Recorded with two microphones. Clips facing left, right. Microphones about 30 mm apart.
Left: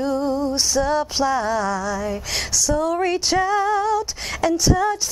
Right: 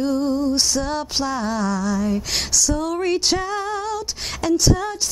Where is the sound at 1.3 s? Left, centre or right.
Centre.